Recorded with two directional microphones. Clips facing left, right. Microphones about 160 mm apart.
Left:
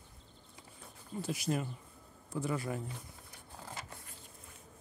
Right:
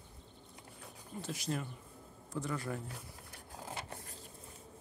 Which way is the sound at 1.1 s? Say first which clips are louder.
Left 4 dB; 10° left (ahead or behind).